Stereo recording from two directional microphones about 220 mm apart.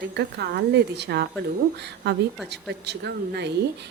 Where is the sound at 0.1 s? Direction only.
50° right (ahead or behind).